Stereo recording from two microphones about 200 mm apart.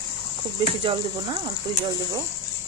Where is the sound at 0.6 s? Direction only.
25° right (ahead or behind).